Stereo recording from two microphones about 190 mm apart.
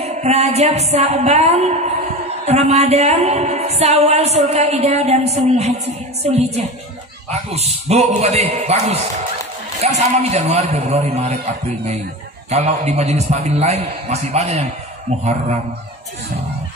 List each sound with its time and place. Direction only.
0.0 s a woman's voice: 35° right (ahead or behind)
12.4 s a woman's voice: 35° right (ahead or behind)